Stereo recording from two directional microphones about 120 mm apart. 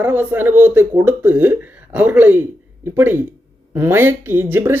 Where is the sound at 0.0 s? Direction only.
15° right (ahead or behind).